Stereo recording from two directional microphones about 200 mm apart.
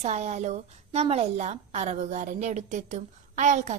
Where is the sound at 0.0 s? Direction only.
35° right (ahead or behind).